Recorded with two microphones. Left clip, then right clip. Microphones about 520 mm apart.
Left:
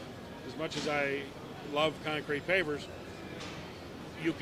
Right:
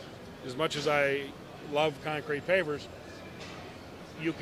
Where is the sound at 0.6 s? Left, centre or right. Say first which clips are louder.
Right 5 dB; right.